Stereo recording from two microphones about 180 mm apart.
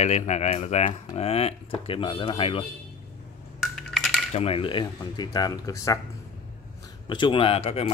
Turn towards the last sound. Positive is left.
turn(degrees=35)  # may be behind; listen again after turning